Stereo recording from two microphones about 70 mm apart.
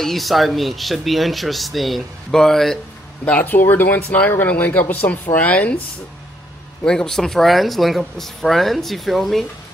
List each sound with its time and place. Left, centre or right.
0.0 s speech: centre
3.3 s speech: left
6.8 s speech: centre